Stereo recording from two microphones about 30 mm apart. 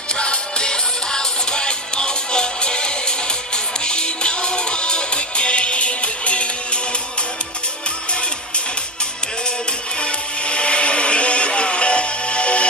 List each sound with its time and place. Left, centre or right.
0.2 s music: left
9.9 s music: left